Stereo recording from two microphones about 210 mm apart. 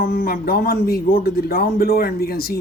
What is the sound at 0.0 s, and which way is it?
Speech, 45° left (ahead or behind).